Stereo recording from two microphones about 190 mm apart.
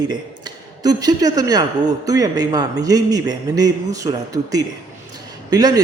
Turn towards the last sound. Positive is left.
turn(degrees=-20)  # may be behind; listen again after turning